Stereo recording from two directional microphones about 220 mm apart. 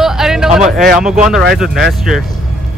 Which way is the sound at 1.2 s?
Centre (ahead or behind).